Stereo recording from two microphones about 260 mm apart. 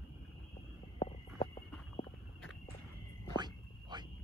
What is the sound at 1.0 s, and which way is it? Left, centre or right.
Walk, left.